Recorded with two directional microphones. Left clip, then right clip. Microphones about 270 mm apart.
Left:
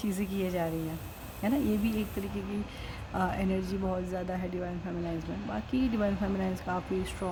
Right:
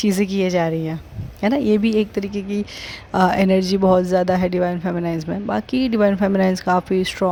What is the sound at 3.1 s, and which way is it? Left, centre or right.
Speech, right.